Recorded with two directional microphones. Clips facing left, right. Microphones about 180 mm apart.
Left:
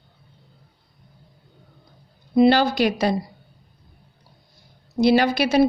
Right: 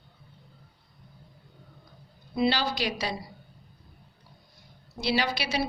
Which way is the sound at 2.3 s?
50° left (ahead or behind).